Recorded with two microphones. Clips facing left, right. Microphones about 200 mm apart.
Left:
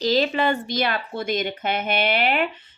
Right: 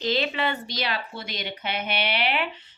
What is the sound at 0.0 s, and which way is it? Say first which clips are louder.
Speech: left 5 dB; 40° left (ahead or behind).